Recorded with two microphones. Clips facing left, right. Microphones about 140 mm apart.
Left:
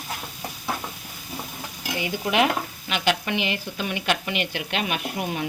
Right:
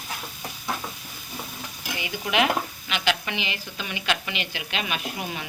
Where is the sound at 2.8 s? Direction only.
50° left (ahead or behind).